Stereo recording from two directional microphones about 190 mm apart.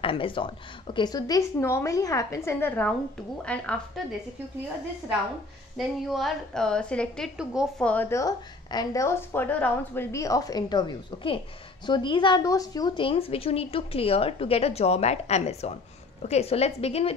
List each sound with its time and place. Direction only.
0.0 s a woman's voice: 30° left (ahead or behind); by 4.0 s 5° left (ahead or behind)
5.8 s a woman's voice: centre (ahead or behind)
7.8 s a woman's voice: 10° left (ahead or behind); by 17.1 s 35° left (ahead or behind)